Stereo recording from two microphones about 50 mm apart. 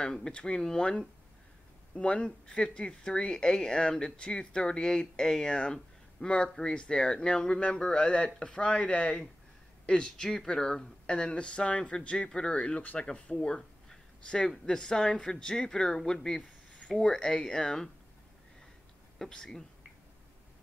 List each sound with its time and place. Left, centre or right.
0.0 s speech: centre
13.6 s a sound: centre
14.7 s speech: centre
19.1 s speech: centre